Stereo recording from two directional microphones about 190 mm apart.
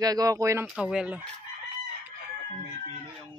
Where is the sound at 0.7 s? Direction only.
5° right (ahead or behind).